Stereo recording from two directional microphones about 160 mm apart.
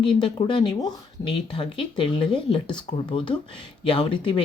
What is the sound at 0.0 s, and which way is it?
Speech, 30° left (ahead or behind).